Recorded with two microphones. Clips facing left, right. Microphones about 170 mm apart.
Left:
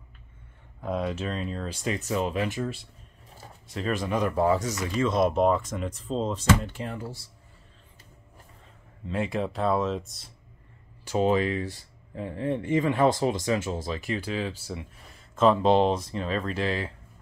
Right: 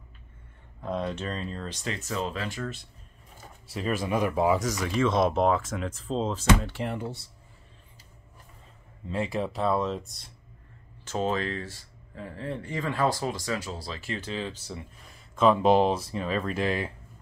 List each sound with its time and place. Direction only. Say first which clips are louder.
0.7 s speech: left 2 dB; 5° left (ahead or behind)
3.6 s speech: even; 5° right (ahead or behind)
4.8 s speech: even; 10° left (ahead or behind)
5.7 s speech: even; 5° right (ahead or behind)
9.1 s speech: left 1 dB; centre (ahead or behind)
11.1 s speech: left 5 dB; 15° left (ahead or behind)
15.3 s speech: even; 5° right (ahead or behind)